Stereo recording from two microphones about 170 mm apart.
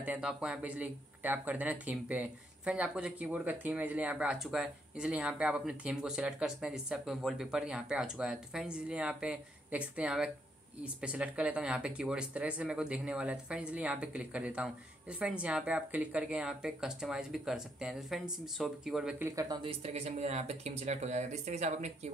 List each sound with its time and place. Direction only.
0.0 s speech: 5° right (ahead or behind)
19.2 s speech: 20° right (ahead or behind)
19.6 s speech: 35° right (ahead or behind)